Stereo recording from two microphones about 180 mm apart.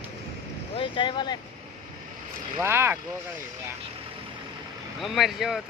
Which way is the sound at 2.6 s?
15° right (ahead or behind).